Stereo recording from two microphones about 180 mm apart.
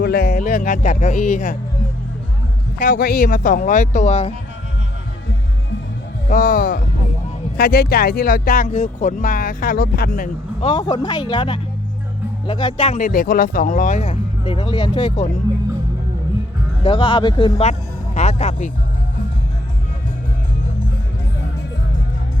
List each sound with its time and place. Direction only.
0.0 s speech: 60° left (ahead or behind)
2.7 s speech: 55° left (ahead or behind); by 4.4 s 35° left (ahead or behind)
6.2 s speech: 50° left (ahead or behind)
10.6 s speech: 25° left (ahead or behind)
13.0 s speech: 50° left (ahead or behind); by 15.3 s 30° left (ahead or behind)
16.8 s speech: 30° left (ahead or behind)